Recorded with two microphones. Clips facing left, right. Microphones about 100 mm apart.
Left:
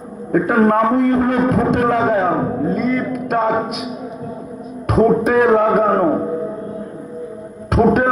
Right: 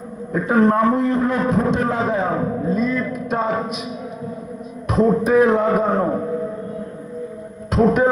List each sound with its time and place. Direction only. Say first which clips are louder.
0.3 s a man's voice: left 2 dB; 60° left (ahead or behind)
4.9 s a man's voice: left 2 dB; 70° left (ahead or behind)
7.7 s music: left 2 dB; 60° left (ahead or behind)